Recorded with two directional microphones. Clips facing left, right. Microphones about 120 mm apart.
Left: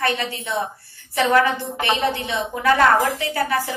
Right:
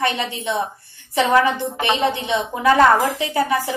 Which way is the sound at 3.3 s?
20° right (ahead or behind).